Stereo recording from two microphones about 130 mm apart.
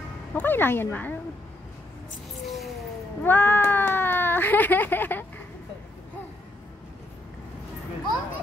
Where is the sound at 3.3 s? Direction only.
15° left (ahead or behind).